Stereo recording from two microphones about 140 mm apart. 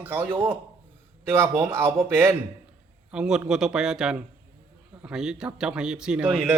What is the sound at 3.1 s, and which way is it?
Speech, 5° right (ahead or behind).